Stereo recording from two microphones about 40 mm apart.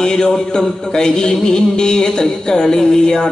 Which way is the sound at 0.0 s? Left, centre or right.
Centre.